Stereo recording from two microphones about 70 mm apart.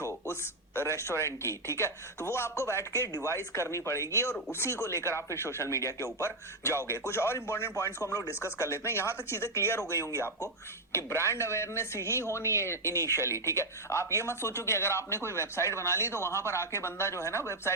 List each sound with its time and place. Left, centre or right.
0.0 s speech: left
10.9 s speech: left